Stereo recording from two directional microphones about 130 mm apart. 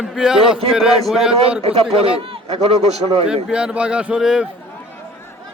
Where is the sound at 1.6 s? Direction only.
45° right (ahead or behind).